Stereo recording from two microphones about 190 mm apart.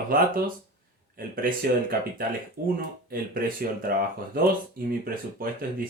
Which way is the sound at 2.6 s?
50° right (ahead or behind).